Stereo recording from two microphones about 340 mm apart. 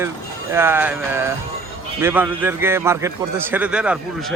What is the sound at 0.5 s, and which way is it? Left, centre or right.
A man's voice, centre.